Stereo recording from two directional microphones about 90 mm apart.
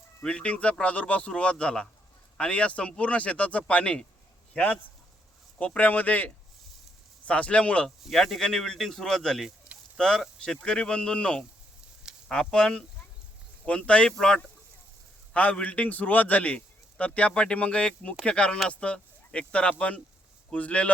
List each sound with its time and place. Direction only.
0.2 s a man's voice: 10° left (ahead or behind)
7.9 s a man's voice: 5° left (ahead or behind)